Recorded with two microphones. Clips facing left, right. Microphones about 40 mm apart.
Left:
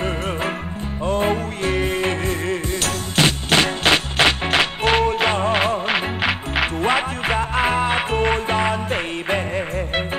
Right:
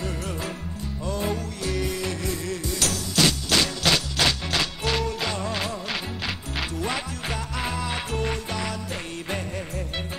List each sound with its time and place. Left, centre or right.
1.0 s music: left